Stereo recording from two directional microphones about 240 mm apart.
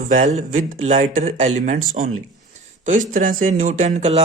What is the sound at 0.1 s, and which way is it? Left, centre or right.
Speech, right.